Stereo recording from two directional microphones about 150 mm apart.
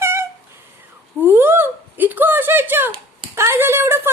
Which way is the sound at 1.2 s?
15° right (ahead or behind).